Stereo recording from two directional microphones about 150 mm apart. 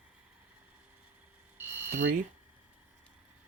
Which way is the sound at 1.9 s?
90° right.